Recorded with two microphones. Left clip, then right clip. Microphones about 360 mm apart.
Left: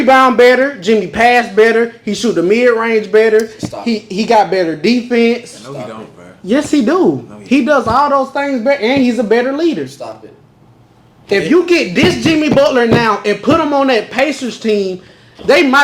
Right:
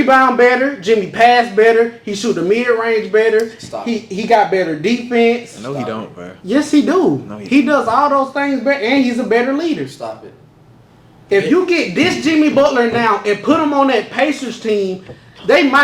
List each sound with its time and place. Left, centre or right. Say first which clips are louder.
0.1 s a man's voice: left 4 dB; left
6.5 s a man's voice: left 1 dB; left
10.0 s speech: right 1 dB; centre
11.3 s a man's voice: left 2 dB; left